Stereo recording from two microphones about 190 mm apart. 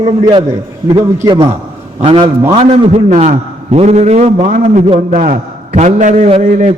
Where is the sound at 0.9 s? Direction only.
20° right (ahead or behind).